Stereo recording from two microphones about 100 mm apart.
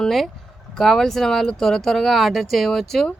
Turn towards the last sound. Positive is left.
turn(degrees=0)  # may be behind; listen again after turning